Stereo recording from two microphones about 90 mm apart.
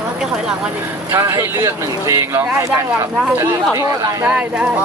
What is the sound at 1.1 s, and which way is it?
Speech, 35° right (ahead or behind).